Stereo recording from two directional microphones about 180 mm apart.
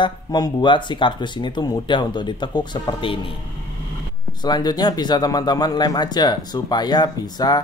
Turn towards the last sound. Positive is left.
turn(degrees=25)  # may be behind; listen again after turning